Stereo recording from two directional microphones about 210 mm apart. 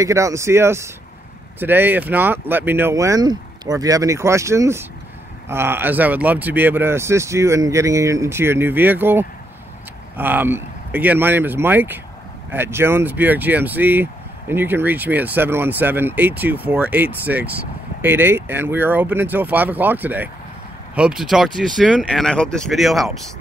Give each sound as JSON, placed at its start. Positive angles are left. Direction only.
{"t": 0.0, "sound": "speech", "side_deg": -15}